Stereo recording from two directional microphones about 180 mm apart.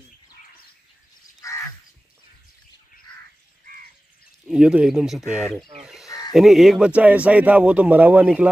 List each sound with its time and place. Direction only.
1.4 s crow: 20° left (ahead or behind)
4.5 s speech: 5° right (ahead or behind)
6.0 s crow: 20° left (ahead or behind)
6.3 s speech: centre (ahead or behind)